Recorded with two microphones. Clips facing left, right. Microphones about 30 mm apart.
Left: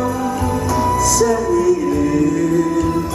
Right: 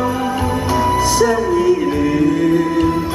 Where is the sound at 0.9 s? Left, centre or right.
Right.